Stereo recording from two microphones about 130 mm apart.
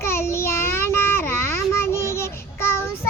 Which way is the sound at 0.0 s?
20° left (ahead or behind).